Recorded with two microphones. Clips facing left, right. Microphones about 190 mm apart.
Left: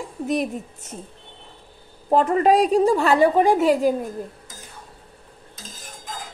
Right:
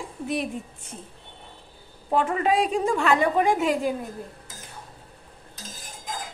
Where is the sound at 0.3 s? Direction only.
40° left (ahead or behind).